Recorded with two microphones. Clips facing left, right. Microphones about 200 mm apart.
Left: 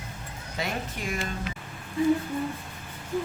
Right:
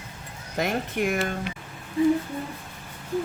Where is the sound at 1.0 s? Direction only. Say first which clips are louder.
Right 7 dB; 60° right (ahead or behind).